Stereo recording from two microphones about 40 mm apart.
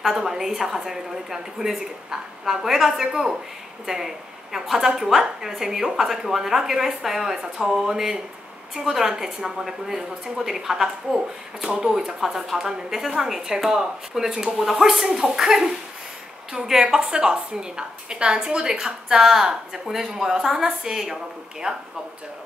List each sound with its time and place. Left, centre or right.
0.0 s a woman's voice: centre
16.8 s a woman's voice: centre